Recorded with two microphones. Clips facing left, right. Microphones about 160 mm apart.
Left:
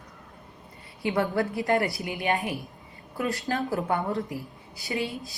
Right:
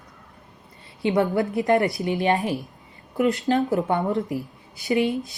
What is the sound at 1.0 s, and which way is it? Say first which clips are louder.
Speech: right 5 dB; 20° right (ahead or behind).